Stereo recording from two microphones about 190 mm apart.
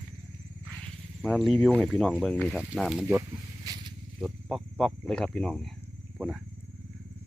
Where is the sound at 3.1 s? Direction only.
15° right (ahead or behind).